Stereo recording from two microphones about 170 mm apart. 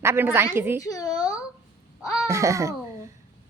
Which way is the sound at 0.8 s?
20° left (ahead or behind).